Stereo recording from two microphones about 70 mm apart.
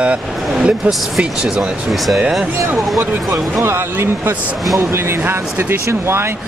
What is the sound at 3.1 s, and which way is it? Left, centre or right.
Speech, right.